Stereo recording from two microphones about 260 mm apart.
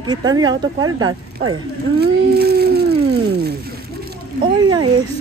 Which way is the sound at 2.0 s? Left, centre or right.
Right.